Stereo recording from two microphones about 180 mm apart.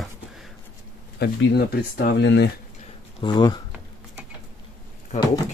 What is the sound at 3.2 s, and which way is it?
Speech, 25° left (ahead or behind).